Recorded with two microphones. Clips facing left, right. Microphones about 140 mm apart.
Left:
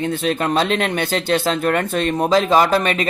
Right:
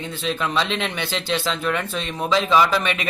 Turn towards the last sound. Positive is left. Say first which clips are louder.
# left 4 dB
turn(degrees=45)  # may be behind; listen again after turning